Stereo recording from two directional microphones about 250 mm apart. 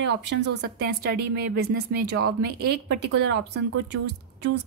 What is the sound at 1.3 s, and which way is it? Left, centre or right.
Speech, right.